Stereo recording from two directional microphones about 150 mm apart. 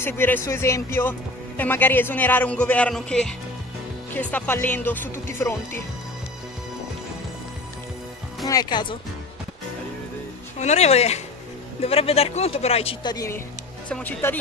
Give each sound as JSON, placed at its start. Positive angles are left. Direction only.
{"t": 0.0, "sound": "a man's voice", "side_deg": 15}
{"t": 8.5, "sound": "speech", "side_deg": 25}
{"t": 10.6, "sound": "speech", "side_deg": 45}
{"t": 13.0, "sound": "speech", "side_deg": 25}
{"t": 13.8, "sound": "a man's voice", "side_deg": 10}